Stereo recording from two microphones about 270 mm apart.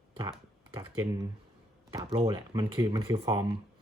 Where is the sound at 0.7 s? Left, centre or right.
Centre.